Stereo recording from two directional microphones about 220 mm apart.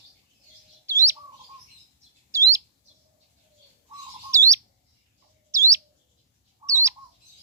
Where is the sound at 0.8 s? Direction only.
10° right (ahead or behind).